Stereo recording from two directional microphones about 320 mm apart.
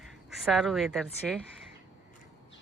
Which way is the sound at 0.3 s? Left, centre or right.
Centre.